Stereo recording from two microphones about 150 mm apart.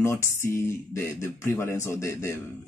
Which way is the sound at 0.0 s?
15° left (ahead or behind).